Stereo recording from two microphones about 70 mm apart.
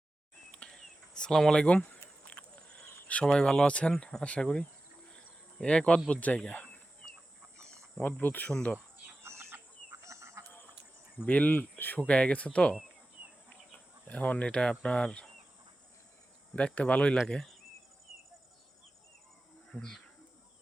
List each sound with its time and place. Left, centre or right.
0.5 s a sound: centre
3.9 s speech: centre
8.2 s speech: left
8.4 s speech: centre
9.2 s chicken: right
10.1 s a sound: right
11.3 s speech: left
11.9 s speech: centre
14.1 s speech: left
14.4 s speech: centre
16.6 s speech: centre
17.2 s speech: centre
19.7 s speech: centre